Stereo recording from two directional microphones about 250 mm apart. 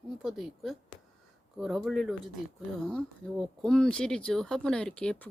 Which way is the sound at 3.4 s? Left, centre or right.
Centre.